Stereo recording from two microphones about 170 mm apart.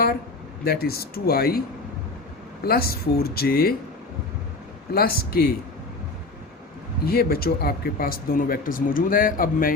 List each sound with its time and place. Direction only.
0.6 s speech: 65° left (ahead or behind)
2.6 s speech: 65° left (ahead or behind)
4.9 s speech: 65° left (ahead or behind)
7.0 s speech: 65° left (ahead or behind)